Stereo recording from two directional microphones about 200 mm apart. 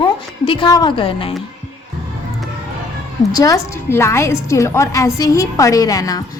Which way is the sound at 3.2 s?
20° left (ahead or behind).